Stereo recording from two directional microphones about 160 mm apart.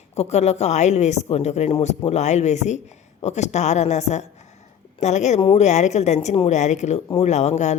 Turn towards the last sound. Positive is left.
turn(degrees=45)  # may be behind; listen again after turning